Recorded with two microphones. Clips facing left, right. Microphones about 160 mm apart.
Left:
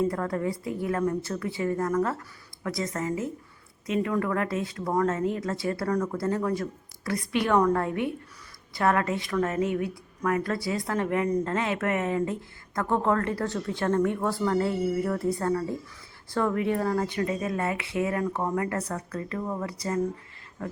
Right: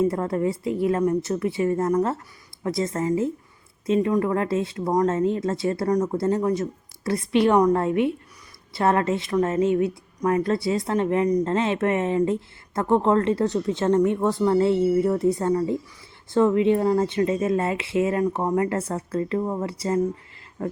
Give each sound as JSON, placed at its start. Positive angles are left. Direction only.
{"t": 0.0, "sound": "speech", "side_deg": -25}